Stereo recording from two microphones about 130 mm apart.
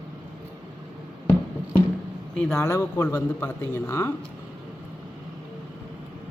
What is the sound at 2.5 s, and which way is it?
A man's voice, 20° left (ahead or behind).